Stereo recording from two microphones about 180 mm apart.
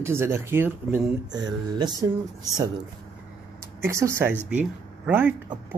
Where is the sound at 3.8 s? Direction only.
15° right (ahead or behind).